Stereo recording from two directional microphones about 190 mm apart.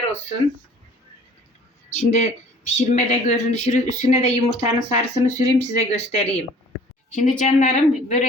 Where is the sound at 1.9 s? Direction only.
35° left (ahead or behind).